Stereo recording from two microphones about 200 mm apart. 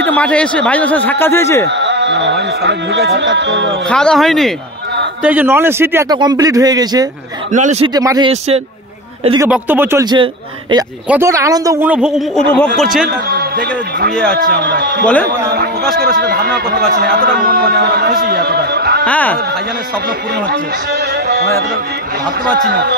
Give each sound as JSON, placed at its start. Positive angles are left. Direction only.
{"t": 0.0, "sound": "speech", "side_deg": 5}
{"t": 1.7, "sound": "speech", "side_deg": -60}
{"t": 3.9, "sound": "a woman's voice", "side_deg": 5}
{"t": 7.5, "sound": "speech", "side_deg": -35}
{"t": 7.9, "sound": "speech", "side_deg": -20}
{"t": 8.3, "sound": "speech", "side_deg": -30}
{"t": 9.5, "sound": "a woman's voice", "side_deg": -10}
{"t": 11.1, "sound": "a woman's voice", "side_deg": -15}
{"t": 13.3, "sound": "a man's voice", "side_deg": -55}
{"t": 14.1, "sound": "speech", "side_deg": 5}
{"t": 14.5, "sound": "speech", "side_deg": -55}
{"t": 19.0, "sound": "speech", "side_deg": 10}
{"t": 20.4, "sound": "a man's voice", "side_deg": -55}
{"t": 22.7, "sound": "speech", "side_deg": -55}